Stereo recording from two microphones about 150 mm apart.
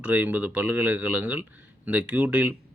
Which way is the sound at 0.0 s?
10° right (ahead or behind).